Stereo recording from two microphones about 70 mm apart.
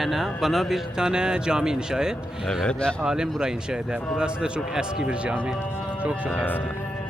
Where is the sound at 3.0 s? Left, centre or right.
Centre.